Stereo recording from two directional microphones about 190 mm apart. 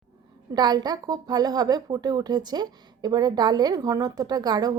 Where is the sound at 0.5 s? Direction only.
20° right (ahead or behind).